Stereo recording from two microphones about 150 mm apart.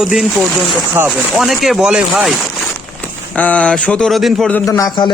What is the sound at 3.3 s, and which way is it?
Speech, 10° left (ahead or behind).